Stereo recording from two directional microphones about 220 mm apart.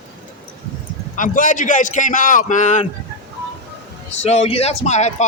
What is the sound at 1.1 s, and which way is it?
A man's voice, 35° left (ahead or behind).